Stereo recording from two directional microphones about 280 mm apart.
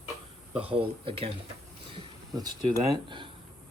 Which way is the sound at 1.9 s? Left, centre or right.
Centre.